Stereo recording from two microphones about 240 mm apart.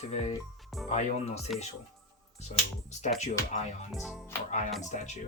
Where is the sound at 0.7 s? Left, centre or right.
Centre.